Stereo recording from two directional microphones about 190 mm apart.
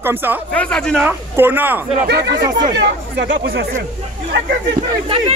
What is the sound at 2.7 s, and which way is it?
Speech, 65° right (ahead or behind).